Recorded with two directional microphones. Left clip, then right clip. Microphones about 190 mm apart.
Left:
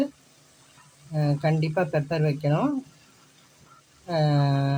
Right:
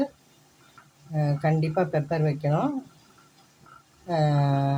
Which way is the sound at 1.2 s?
30° left (ahead or behind).